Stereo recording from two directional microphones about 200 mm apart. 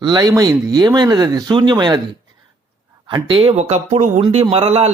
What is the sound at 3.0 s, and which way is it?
Speech, 25° right (ahead or behind).